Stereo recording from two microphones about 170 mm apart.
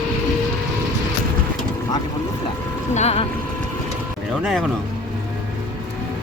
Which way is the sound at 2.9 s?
40° left (ahead or behind).